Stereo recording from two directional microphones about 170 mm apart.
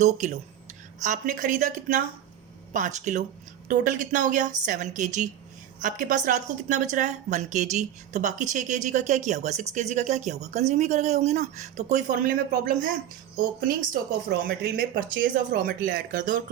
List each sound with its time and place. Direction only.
0.0 s a woman's voice: 45° right (ahead or behind)